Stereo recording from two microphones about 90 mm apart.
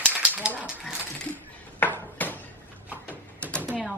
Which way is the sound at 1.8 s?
20° left (ahead or behind).